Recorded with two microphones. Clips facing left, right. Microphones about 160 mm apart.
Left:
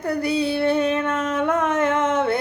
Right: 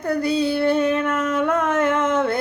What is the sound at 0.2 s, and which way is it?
Music, 25° right (ahead or behind).